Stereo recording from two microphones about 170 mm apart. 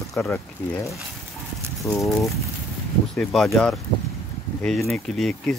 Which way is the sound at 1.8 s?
20° left (ahead or behind).